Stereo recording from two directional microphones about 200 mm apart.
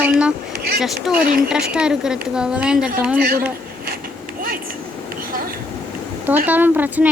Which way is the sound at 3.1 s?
50° right (ahead or behind).